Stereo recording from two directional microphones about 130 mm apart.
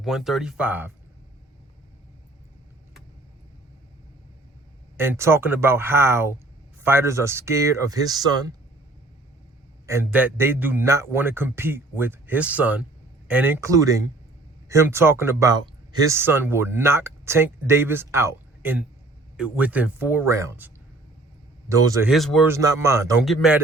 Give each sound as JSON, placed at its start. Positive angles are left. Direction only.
{"t": 0.0, "sound": "speech", "side_deg": -5}
{"t": 4.9, "sound": "a man's voice", "side_deg": -20}
{"t": 9.8, "sound": "a man's voice", "side_deg": -20}
{"t": 21.7, "sound": "speech", "side_deg": -25}
{"t": 22.0, "sound": "speech", "side_deg": 0}
{"t": 22.4, "sound": "speech", "side_deg": -20}
{"t": 23.2, "sound": "speech", "side_deg": 0}